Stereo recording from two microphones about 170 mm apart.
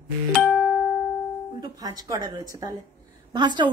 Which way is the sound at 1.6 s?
20° right (ahead or behind).